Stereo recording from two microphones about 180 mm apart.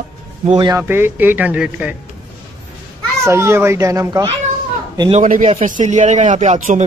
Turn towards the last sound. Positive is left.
turn(degrees=-45)  # may be behind; listen again after turning